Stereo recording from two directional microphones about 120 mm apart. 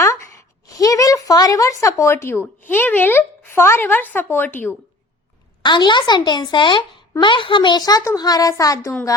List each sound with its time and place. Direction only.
0.7 s a sound: 30° left (ahead or behind)
2.6 s speech: 15° left (ahead or behind)
5.6 s a child's voice: 40° left (ahead or behind)